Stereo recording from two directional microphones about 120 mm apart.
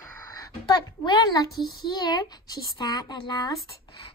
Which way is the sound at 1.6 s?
40° left (ahead or behind).